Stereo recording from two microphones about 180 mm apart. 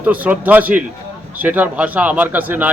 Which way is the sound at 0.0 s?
10° right (ahead or behind).